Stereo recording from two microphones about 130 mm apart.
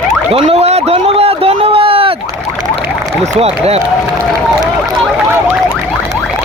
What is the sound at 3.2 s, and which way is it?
Speech, 55° right (ahead or behind).